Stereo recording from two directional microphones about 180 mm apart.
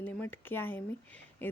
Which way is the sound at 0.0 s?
10° left (ahead or behind).